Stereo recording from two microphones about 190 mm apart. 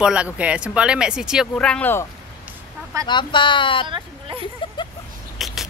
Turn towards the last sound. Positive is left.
turn(degrees=0)  # may be behind; listen again after turning